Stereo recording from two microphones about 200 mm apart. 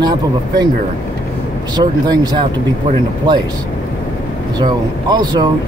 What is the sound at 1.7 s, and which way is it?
Speech, 20° right (ahead or behind).